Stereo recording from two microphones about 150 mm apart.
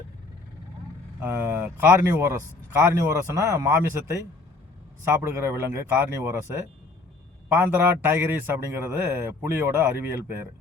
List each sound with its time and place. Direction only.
1.2 s a man's voice: 15° right (ahead or behind)
5.1 s a man's voice: 15° right (ahead or behind)